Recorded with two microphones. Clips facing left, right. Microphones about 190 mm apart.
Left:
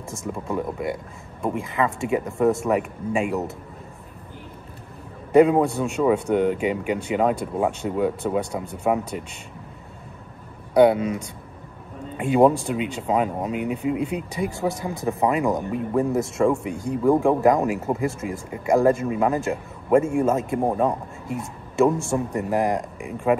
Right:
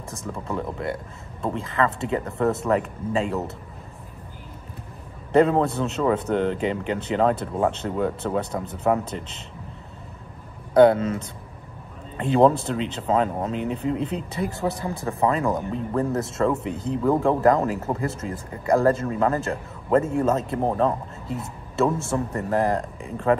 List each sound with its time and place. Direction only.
0.2 s a man's voice: 15° left (ahead or behind)
5.3 s a man's voice: 10° left (ahead or behind)
10.7 s a man's voice: 10° left (ahead or behind)